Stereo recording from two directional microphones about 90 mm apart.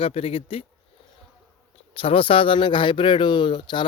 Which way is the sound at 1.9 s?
90° left.